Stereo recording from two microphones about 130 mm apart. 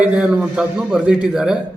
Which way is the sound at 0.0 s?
10° right (ahead or behind).